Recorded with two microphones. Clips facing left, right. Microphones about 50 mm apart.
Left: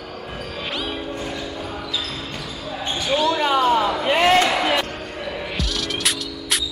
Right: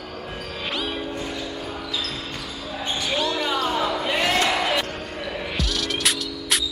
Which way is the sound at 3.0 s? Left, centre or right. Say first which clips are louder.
Left 6 dB; centre.